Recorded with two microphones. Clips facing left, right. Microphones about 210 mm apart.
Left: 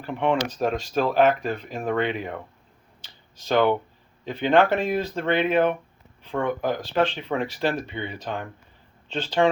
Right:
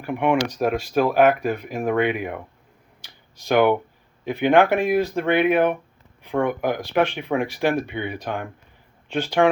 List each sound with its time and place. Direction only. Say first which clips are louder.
0.0 s speech: right 3 dB; 10° right (ahead or behind)
3.0 s a sound: right 1 dB; 10° right (ahead or behind)
4.3 s speech: right 3 dB; 10° right (ahead or behind)